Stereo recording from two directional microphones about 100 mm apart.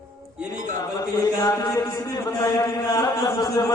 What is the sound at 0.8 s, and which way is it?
A man's voice, 40° left (ahead or behind).